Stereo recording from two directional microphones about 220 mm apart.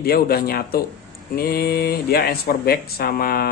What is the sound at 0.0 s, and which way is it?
Speech, 45° left (ahead or behind).